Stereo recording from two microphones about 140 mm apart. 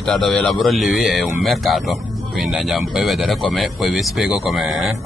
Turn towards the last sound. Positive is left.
turn(degrees=0)  # may be behind; listen again after turning